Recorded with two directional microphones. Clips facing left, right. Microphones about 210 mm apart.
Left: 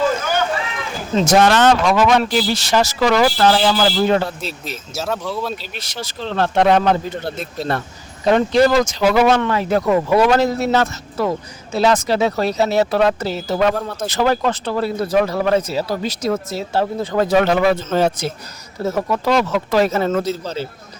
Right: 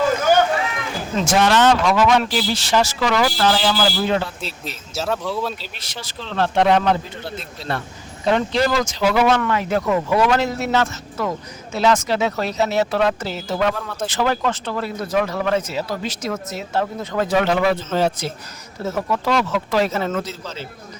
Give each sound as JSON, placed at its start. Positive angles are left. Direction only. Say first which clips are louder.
{"t": 1.1, "sound": "speech", "louder": "left 4 dB", "side_deg": 40}
{"t": 4.9, "sound": "speech", "louder": "even", "side_deg": 0}
{"t": 5.8, "sound": "speech", "louder": "left 6 dB", "side_deg": 40}
{"t": 8.2, "sound": "speech", "louder": "left 5 dB", "side_deg": 45}